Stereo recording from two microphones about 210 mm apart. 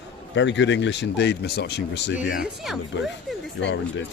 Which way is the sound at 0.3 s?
60° left (ahead or behind).